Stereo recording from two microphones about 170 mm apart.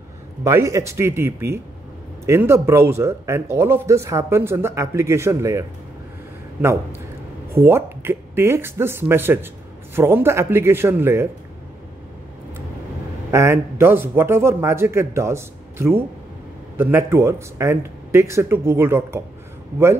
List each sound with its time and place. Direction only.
0.4 s a man's voice: 15° right (ahead or behind)
13.3 s a man's voice: 15° right (ahead or behind)